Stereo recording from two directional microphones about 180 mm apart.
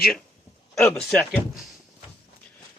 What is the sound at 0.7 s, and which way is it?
Speech, 5° left (ahead or behind).